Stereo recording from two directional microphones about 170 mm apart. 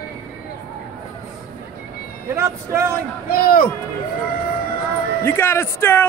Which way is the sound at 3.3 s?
60° left (ahead or behind).